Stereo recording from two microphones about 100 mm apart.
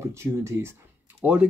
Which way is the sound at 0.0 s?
25° right (ahead or behind).